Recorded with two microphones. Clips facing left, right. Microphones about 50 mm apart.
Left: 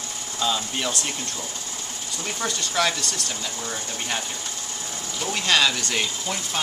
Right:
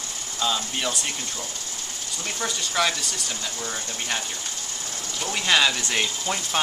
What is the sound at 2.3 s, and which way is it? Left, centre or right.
Speech, centre.